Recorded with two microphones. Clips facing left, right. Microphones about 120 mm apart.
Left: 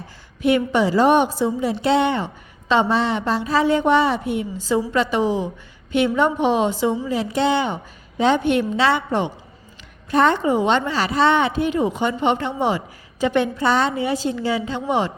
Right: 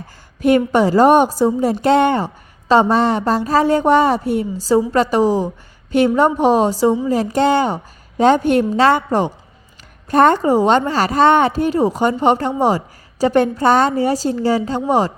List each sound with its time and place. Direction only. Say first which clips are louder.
0.4 s a woman's voice: right 4 dB; 45° right (ahead or behind)